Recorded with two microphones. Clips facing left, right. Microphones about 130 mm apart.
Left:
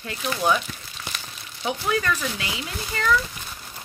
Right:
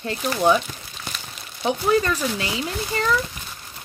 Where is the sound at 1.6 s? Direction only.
30° right (ahead or behind).